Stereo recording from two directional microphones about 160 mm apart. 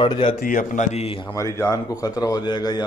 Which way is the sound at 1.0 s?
35° left (ahead or behind).